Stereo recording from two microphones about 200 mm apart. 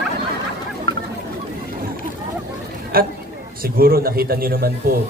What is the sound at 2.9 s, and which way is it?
A man's voice, 45° right (ahead or behind).